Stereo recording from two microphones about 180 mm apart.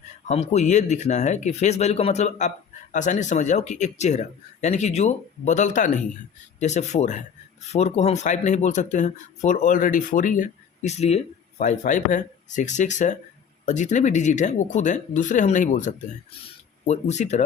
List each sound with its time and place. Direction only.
0.3 s speech: 40° left (ahead or behind)